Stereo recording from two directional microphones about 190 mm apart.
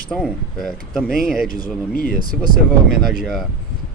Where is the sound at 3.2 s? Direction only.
Centre (ahead or behind).